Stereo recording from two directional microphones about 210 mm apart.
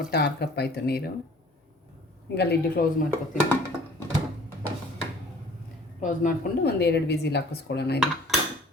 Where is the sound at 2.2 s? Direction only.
50° left (ahead or behind).